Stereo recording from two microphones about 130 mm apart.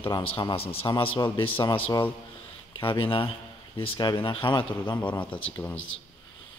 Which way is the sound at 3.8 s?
35° left (ahead or behind).